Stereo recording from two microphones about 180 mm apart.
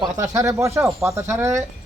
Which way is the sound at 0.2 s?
15° right (ahead or behind).